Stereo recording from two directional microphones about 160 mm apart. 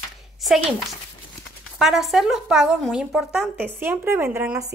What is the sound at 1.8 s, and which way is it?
A woman's voice, centre (ahead or behind).